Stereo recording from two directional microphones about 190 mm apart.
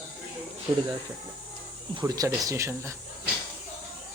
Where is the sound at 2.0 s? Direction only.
20° right (ahead or behind).